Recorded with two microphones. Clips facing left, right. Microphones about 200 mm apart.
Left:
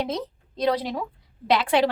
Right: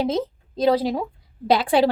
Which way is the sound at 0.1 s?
25° right (ahead or behind).